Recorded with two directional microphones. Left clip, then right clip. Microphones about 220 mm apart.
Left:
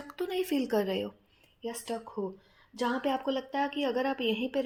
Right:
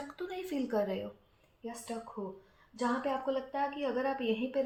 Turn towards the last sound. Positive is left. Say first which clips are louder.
# left 2 dB
turn(degrees=45)  # may be behind; listen again after turning